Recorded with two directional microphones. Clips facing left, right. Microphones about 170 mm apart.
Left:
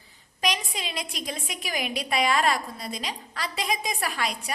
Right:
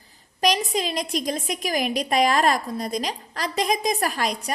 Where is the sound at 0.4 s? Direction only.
40° right (ahead or behind).